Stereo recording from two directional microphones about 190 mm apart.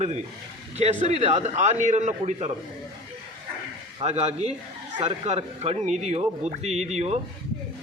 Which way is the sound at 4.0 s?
35° right (ahead or behind).